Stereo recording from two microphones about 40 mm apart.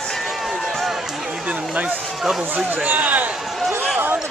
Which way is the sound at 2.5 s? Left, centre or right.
Right.